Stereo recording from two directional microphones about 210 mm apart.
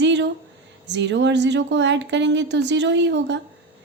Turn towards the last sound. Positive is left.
turn(degrees=-55)  # may be behind; listen again after turning